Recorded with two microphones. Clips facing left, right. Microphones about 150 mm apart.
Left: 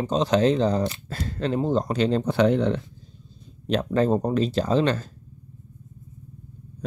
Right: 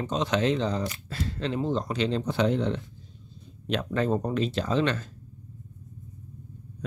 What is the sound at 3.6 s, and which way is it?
Speech, 35° left (ahead or behind).